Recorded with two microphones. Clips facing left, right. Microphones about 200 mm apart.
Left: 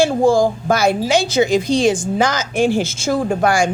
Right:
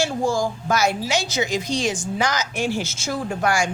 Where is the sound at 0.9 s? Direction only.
30° left (ahead or behind).